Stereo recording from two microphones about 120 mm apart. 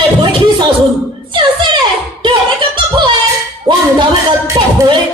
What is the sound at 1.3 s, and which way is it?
Chuckle, 45° right (ahead or behind).